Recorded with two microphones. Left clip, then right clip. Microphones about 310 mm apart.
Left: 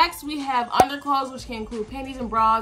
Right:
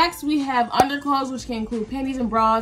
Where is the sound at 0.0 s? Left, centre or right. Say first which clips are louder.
Right 1 dB; centre.